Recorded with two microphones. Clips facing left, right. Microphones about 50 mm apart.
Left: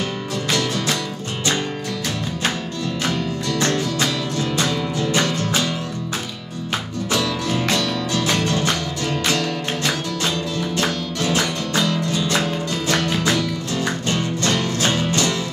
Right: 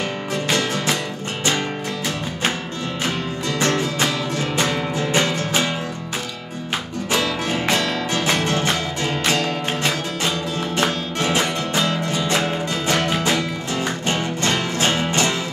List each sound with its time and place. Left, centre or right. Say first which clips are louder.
0.5 s music: even; right
3.1 s music: left 1 dB; right
7.1 s music: right 1 dB; right